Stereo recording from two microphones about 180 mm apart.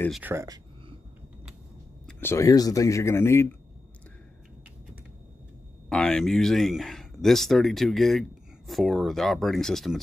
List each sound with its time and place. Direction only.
0.1 s speech: 10° right (ahead or behind)
2.0 s speech: 10° left (ahead or behind)
5.9 s speech: 5° left (ahead or behind)